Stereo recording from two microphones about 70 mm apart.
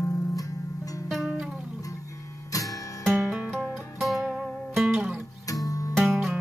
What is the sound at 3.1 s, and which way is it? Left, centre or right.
Music, centre.